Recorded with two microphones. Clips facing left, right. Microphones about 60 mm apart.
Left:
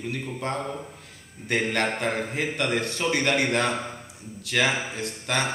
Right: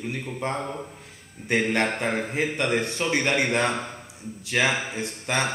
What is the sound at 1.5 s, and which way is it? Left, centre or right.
Speech, right.